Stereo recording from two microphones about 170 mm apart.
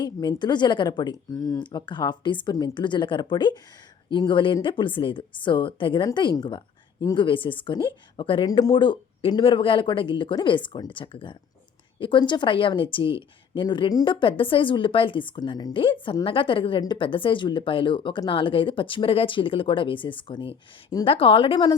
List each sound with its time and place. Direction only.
0.0 s a woman's voice: 25° left (ahead or behind)